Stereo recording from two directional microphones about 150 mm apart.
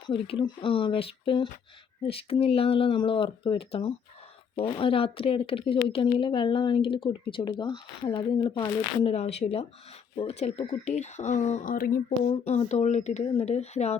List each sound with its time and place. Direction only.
0.1 s a woman's voice: 35° left (ahead or behind)